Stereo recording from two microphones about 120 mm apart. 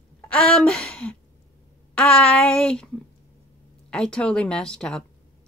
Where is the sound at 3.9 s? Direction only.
5° left (ahead or behind).